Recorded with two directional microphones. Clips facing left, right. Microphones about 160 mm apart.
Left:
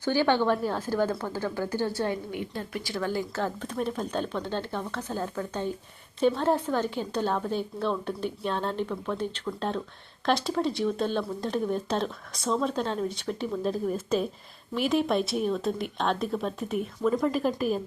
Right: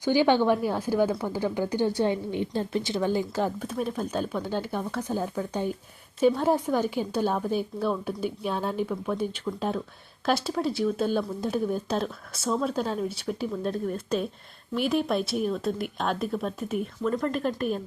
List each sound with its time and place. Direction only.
0.0 s speech: 15° right (ahead or behind)
2.3 s speech: 30° right (ahead or behind); by 17.7 s 5° left (ahead or behind)